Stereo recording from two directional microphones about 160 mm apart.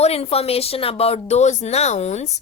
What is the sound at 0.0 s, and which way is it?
A woman's voice, 40° left (ahead or behind).